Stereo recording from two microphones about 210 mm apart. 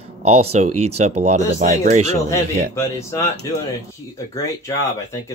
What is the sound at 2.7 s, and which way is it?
Speech, 15° left (ahead or behind).